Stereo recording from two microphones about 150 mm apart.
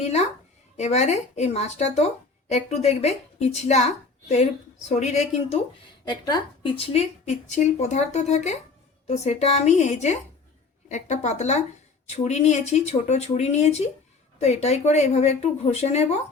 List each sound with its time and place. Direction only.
0.0 s speech: 45° left (ahead or behind)
4.9 s speech: 50° left (ahead or behind)
6.1 s speech: 30° left (ahead or behind); by 16.2 s 45° left (ahead or behind)